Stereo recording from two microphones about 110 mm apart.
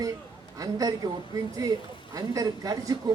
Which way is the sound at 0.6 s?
35° right (ahead or behind).